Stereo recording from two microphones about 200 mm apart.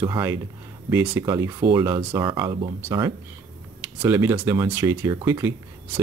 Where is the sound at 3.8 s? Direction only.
10° right (ahead or behind).